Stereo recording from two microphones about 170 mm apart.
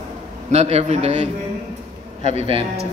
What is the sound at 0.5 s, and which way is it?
Speech, 40° right (ahead or behind).